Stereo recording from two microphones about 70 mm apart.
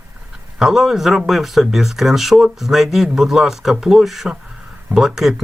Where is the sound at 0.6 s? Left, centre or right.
Centre.